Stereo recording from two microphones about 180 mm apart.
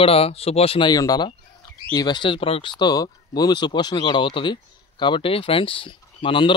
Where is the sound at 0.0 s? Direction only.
35° left (ahead or behind).